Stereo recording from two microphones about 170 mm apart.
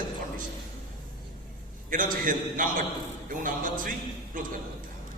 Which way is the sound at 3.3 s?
55° right (ahead or behind).